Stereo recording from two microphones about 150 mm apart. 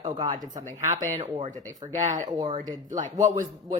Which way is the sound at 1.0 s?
50° right (ahead or behind).